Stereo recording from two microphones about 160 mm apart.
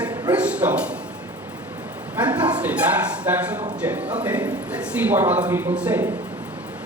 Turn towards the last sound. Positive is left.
turn(degrees=-10)  # may be behind; listen again after turning